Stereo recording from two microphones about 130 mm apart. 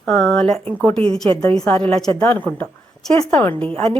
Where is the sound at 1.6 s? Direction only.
10° left (ahead or behind).